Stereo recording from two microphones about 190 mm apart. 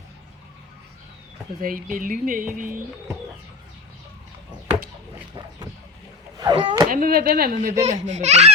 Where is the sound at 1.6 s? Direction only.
45° right (ahead or behind).